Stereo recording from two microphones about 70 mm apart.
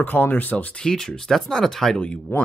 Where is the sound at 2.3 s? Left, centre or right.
Left.